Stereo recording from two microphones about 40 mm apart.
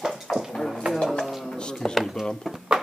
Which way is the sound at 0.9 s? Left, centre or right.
Centre.